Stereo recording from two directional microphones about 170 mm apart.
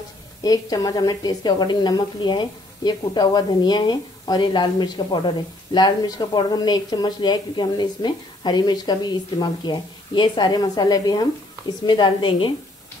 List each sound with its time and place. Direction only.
0.4 s a woman's voice: 20° left (ahead or behind)